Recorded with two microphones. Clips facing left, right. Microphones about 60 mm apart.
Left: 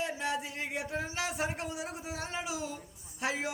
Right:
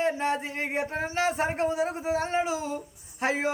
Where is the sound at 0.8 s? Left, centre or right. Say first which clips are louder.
Right 8 dB; right.